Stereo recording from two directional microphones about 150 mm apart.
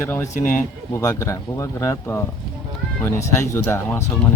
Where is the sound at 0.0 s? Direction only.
15° left (ahead or behind).